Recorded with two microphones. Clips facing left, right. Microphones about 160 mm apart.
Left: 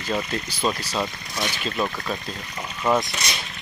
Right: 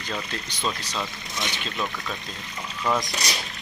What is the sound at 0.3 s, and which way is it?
Speech, 10° left (ahead or behind).